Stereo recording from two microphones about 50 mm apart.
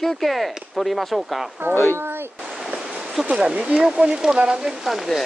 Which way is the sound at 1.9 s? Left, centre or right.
Right.